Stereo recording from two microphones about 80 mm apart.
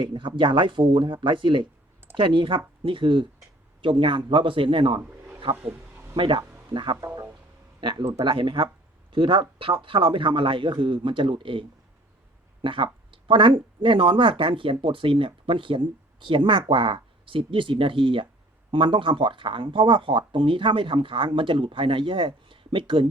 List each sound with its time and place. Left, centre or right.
0.0 s speech: right
5.1 s a sound: centre
6.1 s speech: right
12.6 s speech: right